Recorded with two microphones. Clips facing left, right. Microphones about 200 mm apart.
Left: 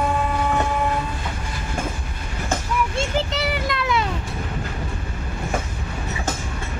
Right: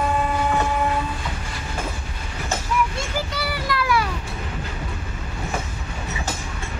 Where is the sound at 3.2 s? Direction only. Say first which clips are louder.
Left 3 dB; 25° left (ahead or behind).